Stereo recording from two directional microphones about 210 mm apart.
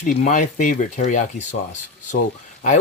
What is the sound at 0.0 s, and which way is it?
Speech, 35° left (ahead or behind).